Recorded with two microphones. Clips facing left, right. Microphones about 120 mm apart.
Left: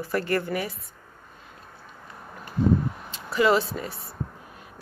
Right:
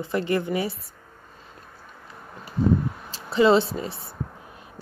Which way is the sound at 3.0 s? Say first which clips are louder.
Right 4 dB; 30° right (ahead or behind).